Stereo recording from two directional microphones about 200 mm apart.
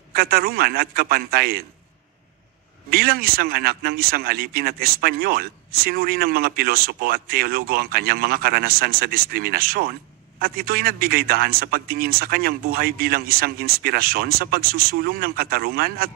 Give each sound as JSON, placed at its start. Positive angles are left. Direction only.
{"t": 0.1, "sound": "speech", "side_deg": -50}
{"t": 2.9, "sound": "speech", "side_deg": -50}